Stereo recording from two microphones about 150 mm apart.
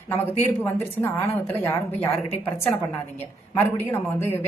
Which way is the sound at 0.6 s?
15° left (ahead or behind).